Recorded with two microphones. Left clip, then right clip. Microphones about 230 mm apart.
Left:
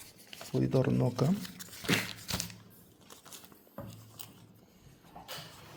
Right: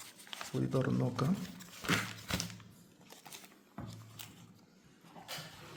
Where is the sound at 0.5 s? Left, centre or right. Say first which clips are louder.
Left 5 dB; centre.